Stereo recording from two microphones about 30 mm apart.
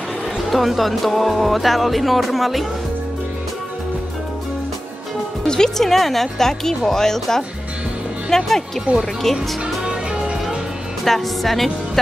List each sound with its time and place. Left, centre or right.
0.5 s speech: centre
5.8 s speech: centre
8.9 s speech: right
9.2 s speech: centre
11.1 s speech: centre